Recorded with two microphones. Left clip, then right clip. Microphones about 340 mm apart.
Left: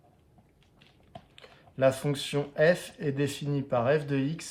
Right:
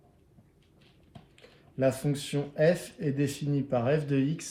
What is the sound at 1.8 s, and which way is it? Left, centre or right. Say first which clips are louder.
Speech: left 3 dB; centre.